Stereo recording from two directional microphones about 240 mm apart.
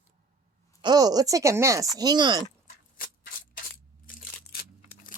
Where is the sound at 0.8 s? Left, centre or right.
Centre.